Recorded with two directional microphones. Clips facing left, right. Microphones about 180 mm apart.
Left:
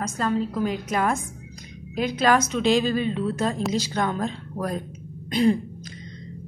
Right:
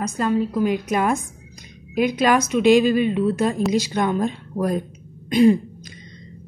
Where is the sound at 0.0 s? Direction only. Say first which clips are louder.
Right 4 dB; 15° right (ahead or behind).